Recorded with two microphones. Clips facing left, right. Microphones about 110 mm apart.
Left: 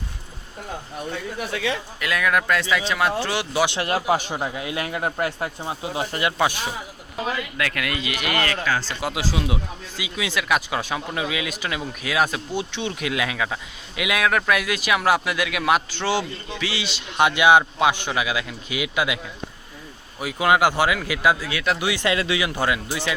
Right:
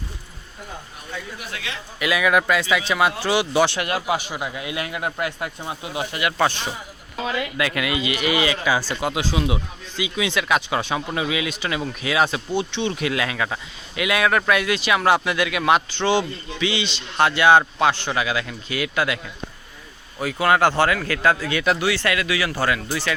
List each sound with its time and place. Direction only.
2.0 s speech: 5° right (ahead or behind)
3.8 s speech: 35° left (ahead or behind)
6.3 s a man's voice: 10° left (ahead or behind)
7.5 s speech: 5° right (ahead or behind)
9.0 s a man's voice: centre (ahead or behind)